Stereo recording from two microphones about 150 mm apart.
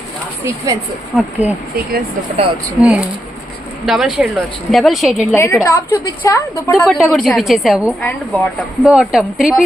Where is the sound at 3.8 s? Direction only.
5° right (ahead or behind).